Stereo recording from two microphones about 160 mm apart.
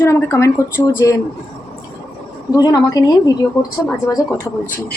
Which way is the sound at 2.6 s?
25° left (ahead or behind).